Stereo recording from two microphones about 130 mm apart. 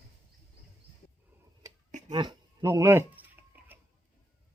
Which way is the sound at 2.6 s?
20° right (ahead or behind).